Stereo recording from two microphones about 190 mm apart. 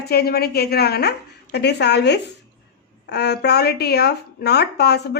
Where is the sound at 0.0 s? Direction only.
55° left (ahead or behind).